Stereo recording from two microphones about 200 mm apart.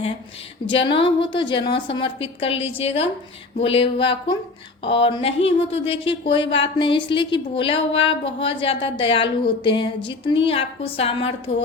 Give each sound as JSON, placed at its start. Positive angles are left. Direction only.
{"t": 0.7, "sound": "speech", "side_deg": 25}